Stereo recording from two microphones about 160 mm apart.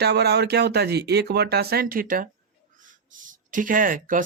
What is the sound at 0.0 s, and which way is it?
Speech, 90° right.